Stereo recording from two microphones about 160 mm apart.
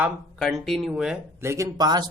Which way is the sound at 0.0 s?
5° right (ahead or behind).